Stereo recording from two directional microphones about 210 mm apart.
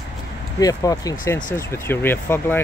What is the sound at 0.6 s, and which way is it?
Speech, 15° left (ahead or behind).